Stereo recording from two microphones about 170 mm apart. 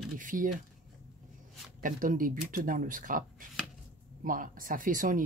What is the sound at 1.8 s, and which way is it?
Speech, 55° right (ahead or behind).